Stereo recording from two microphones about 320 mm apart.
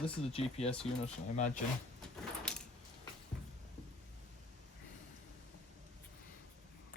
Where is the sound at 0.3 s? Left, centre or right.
Centre.